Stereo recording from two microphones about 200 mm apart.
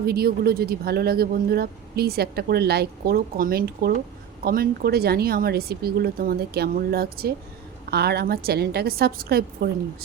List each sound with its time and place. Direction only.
0.0 s speech: 50° right (ahead or behind)